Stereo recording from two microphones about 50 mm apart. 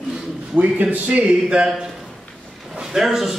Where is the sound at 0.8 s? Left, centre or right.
Right.